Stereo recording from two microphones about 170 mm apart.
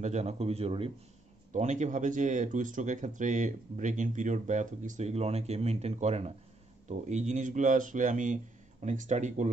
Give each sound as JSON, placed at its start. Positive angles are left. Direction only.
{"t": 0.0, "sound": "a man's voice", "side_deg": -40}